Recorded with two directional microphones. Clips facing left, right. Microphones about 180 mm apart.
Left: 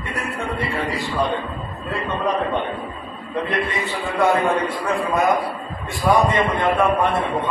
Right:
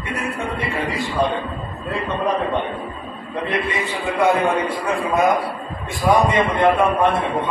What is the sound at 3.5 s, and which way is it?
A man's voice, centre (ahead or behind).